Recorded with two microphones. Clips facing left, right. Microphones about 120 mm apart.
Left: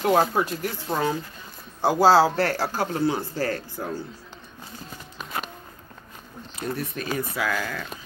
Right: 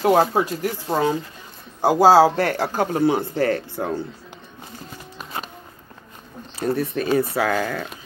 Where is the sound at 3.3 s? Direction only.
60° right (ahead or behind).